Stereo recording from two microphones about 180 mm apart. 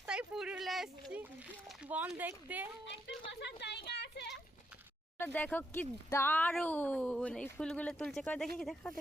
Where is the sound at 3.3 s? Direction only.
75° left (ahead or behind).